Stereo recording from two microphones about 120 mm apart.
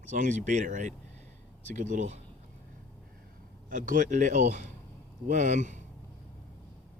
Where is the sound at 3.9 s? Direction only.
90° right.